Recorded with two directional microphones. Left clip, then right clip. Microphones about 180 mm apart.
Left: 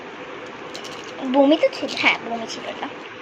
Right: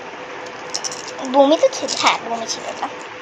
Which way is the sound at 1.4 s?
35° right (ahead or behind).